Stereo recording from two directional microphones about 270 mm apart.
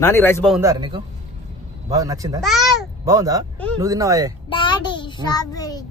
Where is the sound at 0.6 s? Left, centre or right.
Centre.